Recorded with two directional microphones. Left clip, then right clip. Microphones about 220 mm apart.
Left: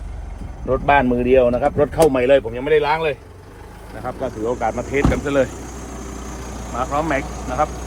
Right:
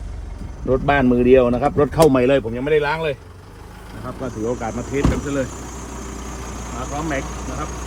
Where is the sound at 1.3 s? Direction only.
5° right (ahead or behind).